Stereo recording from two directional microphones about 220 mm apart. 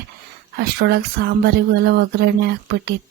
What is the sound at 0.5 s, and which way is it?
Speech, 45° right (ahead or behind).